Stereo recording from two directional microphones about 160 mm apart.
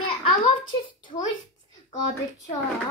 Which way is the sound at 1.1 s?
30° left (ahead or behind).